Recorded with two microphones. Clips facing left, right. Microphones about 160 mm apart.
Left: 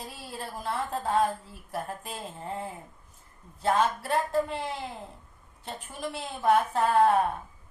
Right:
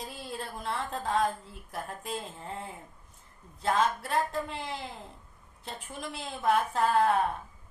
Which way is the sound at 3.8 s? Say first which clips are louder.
Even; centre (ahead or behind).